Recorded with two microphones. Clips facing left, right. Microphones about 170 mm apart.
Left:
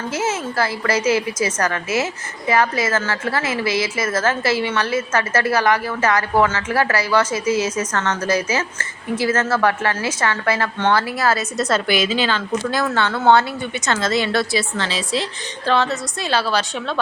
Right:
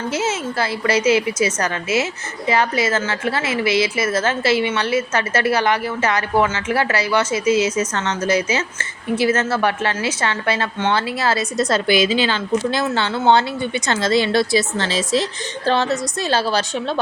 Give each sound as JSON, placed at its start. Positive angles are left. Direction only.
{"t": 0.1, "sound": "a woman's voice", "side_deg": -25}
{"t": 14.8, "sound": "a woman's voice", "side_deg": -45}